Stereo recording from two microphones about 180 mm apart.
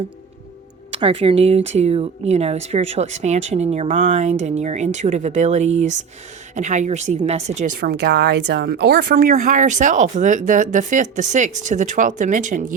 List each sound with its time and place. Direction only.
0.9 s speech: 30° right (ahead or behind)
7.8 s speech: 65° right (ahead or behind)
9.1 s speech: 45° right (ahead or behind)